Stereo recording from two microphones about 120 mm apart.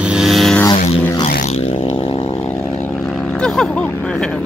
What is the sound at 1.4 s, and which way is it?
Vehicle, 60° left (ahead or behind).